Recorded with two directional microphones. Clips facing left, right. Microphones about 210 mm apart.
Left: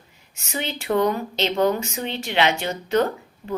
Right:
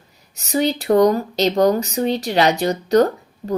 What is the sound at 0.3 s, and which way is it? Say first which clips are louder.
Speech: right 10 dB; 35° right (ahead or behind).